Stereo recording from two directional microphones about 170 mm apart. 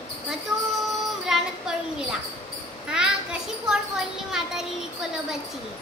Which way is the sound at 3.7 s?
5° right (ahead or behind).